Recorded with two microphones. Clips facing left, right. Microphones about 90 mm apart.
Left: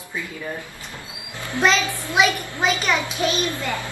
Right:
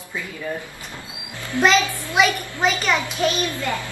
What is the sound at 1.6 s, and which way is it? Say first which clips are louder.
Speech: right 2 dB; centre (ahead or behind).